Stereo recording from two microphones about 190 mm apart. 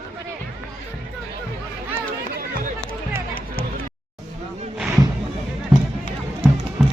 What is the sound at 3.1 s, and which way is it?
Music, 50° left (ahead or behind).